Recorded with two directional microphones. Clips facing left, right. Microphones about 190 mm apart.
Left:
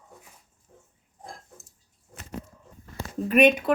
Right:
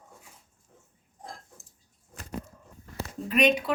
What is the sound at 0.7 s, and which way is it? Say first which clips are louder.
Pig: left 4 dB; 40° left (ahead or behind).